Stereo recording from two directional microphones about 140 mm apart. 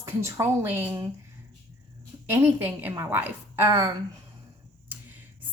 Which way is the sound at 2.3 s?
15° right (ahead or behind).